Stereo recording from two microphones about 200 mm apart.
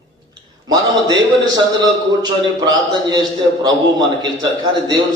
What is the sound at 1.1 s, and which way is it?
A man's voice, 20° right (ahead or behind).